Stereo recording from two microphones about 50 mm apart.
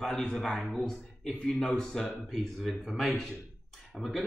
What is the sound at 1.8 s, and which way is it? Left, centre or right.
Speech, centre.